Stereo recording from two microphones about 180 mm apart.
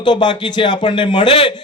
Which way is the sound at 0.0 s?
25° left (ahead or behind).